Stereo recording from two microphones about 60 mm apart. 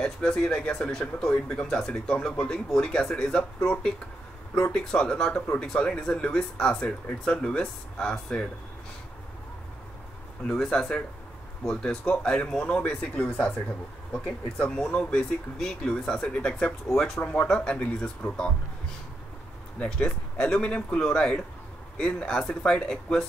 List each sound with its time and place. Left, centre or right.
0.0 s speech: centre
4.7 s speech: centre
10.4 s speech: centre
17.2 s speech: left
19.8 s speech: centre